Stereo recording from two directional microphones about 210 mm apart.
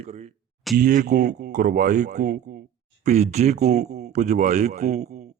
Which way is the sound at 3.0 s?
30° right (ahead or behind).